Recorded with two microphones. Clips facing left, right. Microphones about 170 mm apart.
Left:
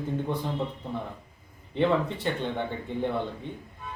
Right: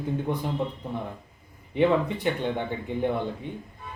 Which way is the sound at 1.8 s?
15° right (ahead or behind).